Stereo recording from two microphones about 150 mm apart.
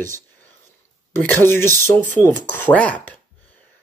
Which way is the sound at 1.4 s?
15° left (ahead or behind).